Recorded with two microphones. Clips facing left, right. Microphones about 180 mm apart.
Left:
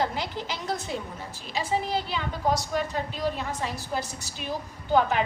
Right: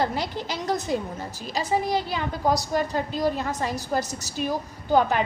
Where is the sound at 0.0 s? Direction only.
40° right (ahead or behind).